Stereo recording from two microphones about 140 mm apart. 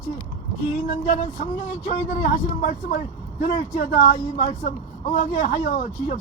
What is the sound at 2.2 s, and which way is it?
A man's voice, 65° left (ahead or behind).